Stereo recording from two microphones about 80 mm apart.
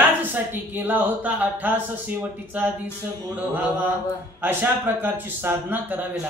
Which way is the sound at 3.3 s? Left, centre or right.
Right.